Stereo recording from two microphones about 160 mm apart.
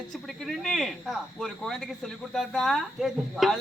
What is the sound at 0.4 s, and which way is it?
Speech, centre (ahead or behind).